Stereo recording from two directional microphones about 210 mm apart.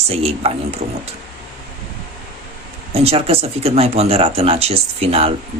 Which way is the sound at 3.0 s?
30° right (ahead or behind).